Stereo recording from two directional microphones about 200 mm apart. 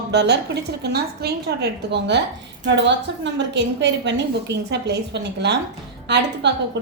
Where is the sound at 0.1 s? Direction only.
55° right (ahead or behind).